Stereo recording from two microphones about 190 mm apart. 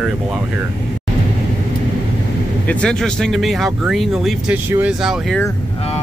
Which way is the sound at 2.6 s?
5° left (ahead or behind).